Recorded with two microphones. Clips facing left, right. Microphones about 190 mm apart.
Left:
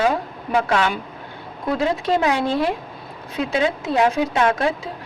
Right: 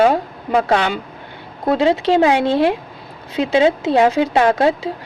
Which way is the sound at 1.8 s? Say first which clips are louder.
Right 5 dB; 80° right.